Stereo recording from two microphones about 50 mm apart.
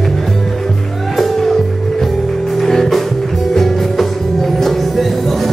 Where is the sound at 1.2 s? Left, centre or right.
Centre.